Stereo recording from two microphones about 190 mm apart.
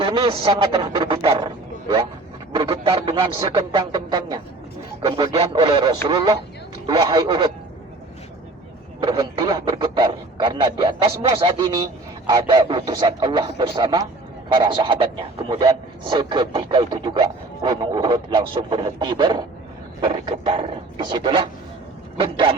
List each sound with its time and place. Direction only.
0.0 s a man's voice: 25° right (ahead or behind)
9.0 s speech: 25° right (ahead or behind)